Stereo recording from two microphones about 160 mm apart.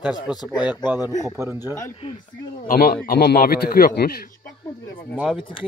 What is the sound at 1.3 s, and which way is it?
Speech, 15° right (ahead or behind).